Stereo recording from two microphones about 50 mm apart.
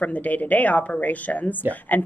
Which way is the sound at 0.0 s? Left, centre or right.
Left.